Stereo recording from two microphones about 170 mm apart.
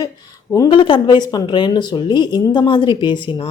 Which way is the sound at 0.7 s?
30° left (ahead or behind).